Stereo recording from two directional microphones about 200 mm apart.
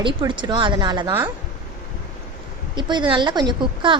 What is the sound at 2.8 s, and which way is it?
A woman's voice, 20° right (ahead or behind).